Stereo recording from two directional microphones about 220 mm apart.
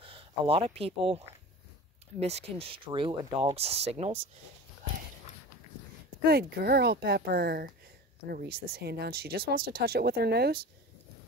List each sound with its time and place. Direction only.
0.0 s speech: 25° right (ahead or behind)
6.2 s speech: 45° right (ahead or behind)